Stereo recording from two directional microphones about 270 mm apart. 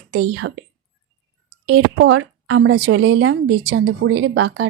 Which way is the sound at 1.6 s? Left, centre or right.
Right.